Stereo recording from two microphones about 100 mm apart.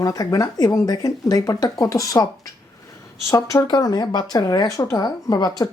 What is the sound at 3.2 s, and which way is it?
Speech, 30° left (ahead or behind).